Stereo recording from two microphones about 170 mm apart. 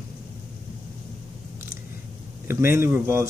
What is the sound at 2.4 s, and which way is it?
Speech, 15° right (ahead or behind).